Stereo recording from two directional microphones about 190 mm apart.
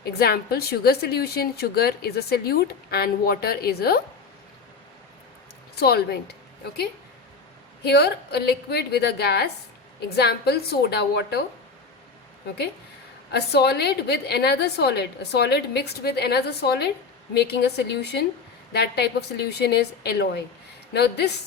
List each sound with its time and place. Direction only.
0.0 s a woman's voice: 55° left (ahead or behind)
5.8 s a woman's voice: 60° left (ahead or behind)
7.9 s a woman's voice: 60° left (ahead or behind)
13.3 s a woman's voice: 60° left (ahead or behind)